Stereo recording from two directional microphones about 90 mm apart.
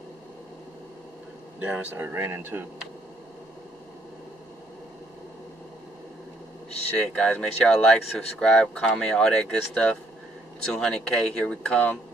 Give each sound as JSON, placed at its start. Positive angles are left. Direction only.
{"t": 1.6, "sound": "speech", "side_deg": -15}
{"t": 7.0, "sound": "speech", "side_deg": 10}